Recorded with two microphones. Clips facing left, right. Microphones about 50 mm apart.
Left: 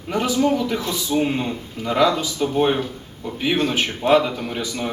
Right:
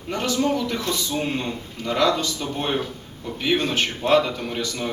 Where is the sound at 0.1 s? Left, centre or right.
Centre.